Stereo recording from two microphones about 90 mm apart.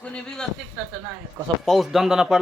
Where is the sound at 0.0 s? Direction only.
10° left (ahead or behind).